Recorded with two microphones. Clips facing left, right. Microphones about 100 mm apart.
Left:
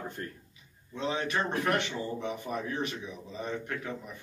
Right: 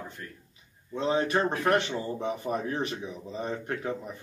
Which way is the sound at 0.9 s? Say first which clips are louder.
Right 5 dB; 35° right (ahead or behind).